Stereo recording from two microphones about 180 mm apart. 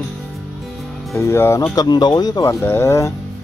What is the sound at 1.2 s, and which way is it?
Speech, 15° left (ahead or behind).